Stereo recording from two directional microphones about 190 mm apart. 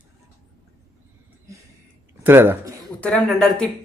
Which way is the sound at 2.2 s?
10° right (ahead or behind).